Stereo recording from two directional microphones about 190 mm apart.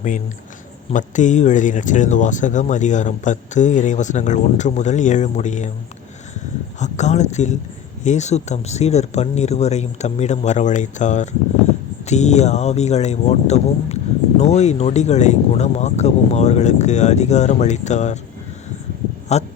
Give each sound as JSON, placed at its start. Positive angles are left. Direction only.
{"t": 0.9, "sound": "speech", "side_deg": 40}
{"t": 6.7, "sound": "speech", "side_deg": 40}
{"t": 19.3, "sound": "speech", "side_deg": 35}